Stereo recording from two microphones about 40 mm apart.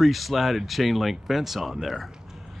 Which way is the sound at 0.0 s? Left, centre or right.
Centre.